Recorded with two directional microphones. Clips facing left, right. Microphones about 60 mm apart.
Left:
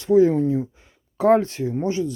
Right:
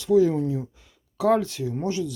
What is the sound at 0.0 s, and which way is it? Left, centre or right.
Speech, left.